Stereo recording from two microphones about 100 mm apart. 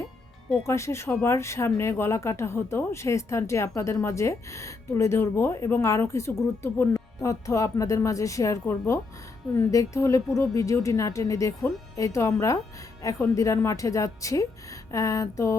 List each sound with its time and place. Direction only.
0.7 s speech: 30° left (ahead or behind)